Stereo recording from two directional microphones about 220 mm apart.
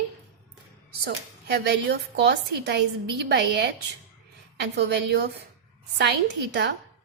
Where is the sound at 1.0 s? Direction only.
50° right (ahead or behind).